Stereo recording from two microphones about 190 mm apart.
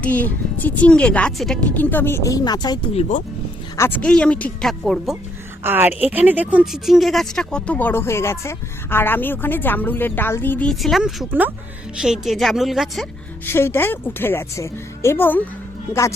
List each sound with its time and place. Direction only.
0.0 s speech: 10° left (ahead or behind); by 3.2 s 35° left (ahead or behind)
3.8 s speech: 10° left (ahead or behind)
5.6 s a woman's voice: 10° right (ahead or behind)
13.4 s speech: 10° left (ahead or behind)